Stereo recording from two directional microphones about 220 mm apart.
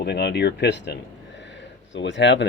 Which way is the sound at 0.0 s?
50° left (ahead or behind).